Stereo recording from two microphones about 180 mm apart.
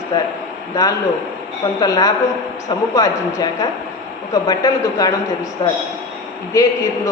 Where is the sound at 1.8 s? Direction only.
20° left (ahead or behind).